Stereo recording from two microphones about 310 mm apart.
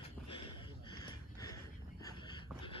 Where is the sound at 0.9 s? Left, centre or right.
Centre.